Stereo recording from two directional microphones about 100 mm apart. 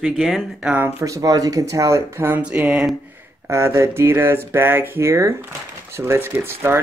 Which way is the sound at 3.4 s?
30° right (ahead or behind).